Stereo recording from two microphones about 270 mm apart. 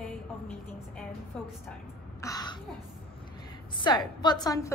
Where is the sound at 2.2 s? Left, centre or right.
Centre.